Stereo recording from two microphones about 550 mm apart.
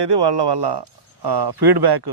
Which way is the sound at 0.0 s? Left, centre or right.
Right.